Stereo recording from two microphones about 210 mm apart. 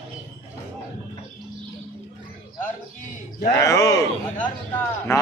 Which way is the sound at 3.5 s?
15° left (ahead or behind).